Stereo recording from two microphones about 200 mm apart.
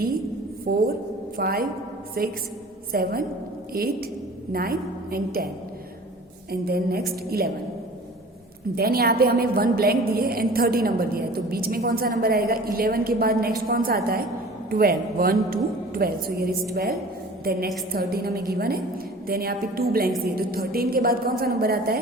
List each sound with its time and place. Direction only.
0.6 s a woman's voice: 50° right (ahead or behind)
6.5 s a woman's voice: 50° right (ahead or behind)
8.7 s a woman's voice: 50° right (ahead or behind)